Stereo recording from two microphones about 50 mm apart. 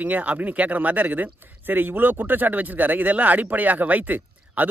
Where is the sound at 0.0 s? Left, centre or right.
Right.